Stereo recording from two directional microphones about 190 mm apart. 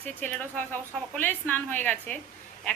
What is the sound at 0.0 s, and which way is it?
A woman's voice, 10° left (ahead or behind).